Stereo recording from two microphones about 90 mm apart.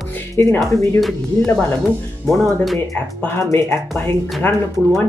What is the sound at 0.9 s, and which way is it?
Speech, centre (ahead or behind).